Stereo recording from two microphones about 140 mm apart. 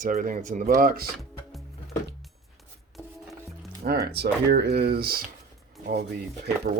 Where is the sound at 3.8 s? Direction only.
80° right.